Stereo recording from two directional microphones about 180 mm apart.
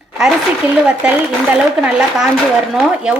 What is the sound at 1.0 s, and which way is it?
Speech, 5° right (ahead or behind).